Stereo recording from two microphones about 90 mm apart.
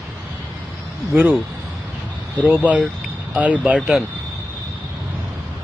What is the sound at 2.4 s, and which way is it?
Speech, 15° right (ahead or behind).